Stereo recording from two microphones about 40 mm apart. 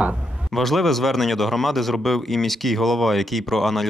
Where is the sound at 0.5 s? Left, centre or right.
Centre.